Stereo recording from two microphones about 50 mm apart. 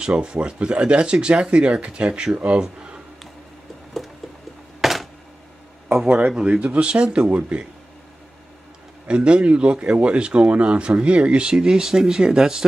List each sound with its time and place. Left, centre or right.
0.0 s speech: centre
4.8 s a sound: centre
6.0 s speech: right
6.3 s speech: centre
9.0 s speech: right